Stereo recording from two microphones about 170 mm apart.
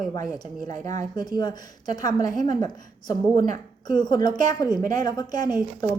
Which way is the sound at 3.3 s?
50° right (ahead or behind).